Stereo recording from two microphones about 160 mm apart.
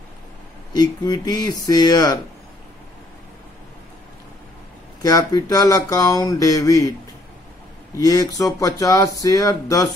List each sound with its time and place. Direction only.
0.7 s speech: 25° left (ahead or behind)
5.0 s speech: 20° left (ahead or behind)
8.0 s speech: 20° left (ahead or behind)